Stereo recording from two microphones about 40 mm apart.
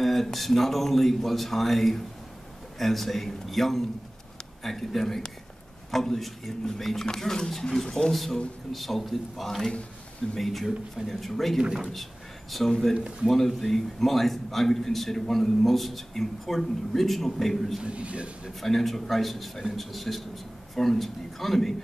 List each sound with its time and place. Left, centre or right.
0.0 s a man's voice: centre
11.9 s a sound: centre
13.3 s a man's voice: centre
17.8 s a man's voice: right
18.5 s a man's voice: centre